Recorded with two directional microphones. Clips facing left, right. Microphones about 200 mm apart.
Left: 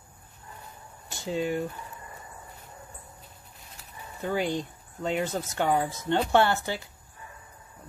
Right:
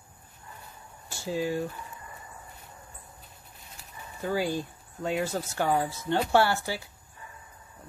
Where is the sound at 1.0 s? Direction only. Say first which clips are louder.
Left 1 dB; 20° left (ahead or behind).